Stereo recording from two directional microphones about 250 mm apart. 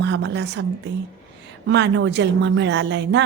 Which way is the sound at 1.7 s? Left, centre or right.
Right.